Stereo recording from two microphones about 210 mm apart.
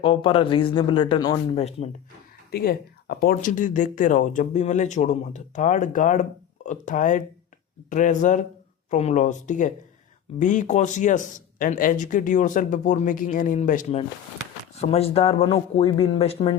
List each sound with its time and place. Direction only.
0.0 s speech: 25° left (ahead or behind)
2.5 s speech: 50° left (ahead or behind); by 16.6 s 30° left (ahead or behind)